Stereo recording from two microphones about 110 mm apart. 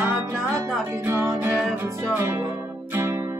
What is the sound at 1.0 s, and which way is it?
Music, 25° right (ahead or behind).